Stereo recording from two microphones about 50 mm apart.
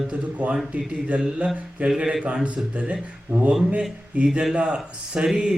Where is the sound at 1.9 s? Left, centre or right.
Centre; by 3.4 s right.